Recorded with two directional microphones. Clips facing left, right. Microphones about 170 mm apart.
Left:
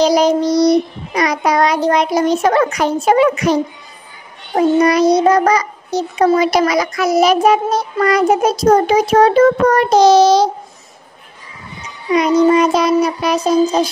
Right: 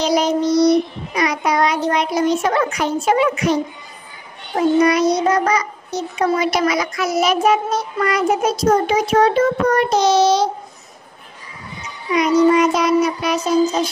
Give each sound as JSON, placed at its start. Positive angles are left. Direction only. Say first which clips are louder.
{"t": 0.0, "sound": "child singing", "louder": "left 5 dB", "side_deg": 35}
{"t": 2.6, "sound": "a child's voice", "louder": "left 4 dB", "side_deg": 40}
{"t": 4.6, "sound": "a child's voice", "louder": "left 3 dB", "side_deg": 35}
{"t": 12.1, "sound": "a child's voice", "louder": "left 2 dB", "side_deg": 30}